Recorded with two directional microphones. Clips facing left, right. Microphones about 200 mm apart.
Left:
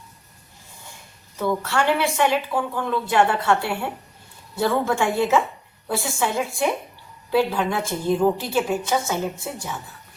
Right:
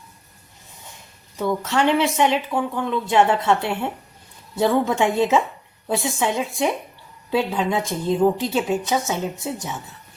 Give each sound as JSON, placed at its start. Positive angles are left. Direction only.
{"t": 1.4, "sound": "a woman's voice", "side_deg": -20}